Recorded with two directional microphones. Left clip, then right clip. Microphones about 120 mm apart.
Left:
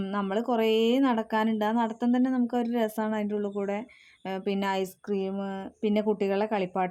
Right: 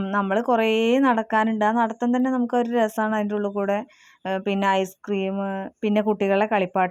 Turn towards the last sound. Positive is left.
turn(degrees=-25)  # may be behind; listen again after turning